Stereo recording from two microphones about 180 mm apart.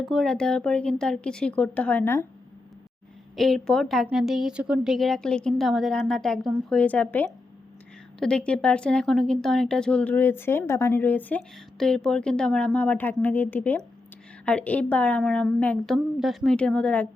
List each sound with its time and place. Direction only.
0.0 s a woman's voice: centre (ahead or behind)
3.3 s a woman's voice: centre (ahead or behind)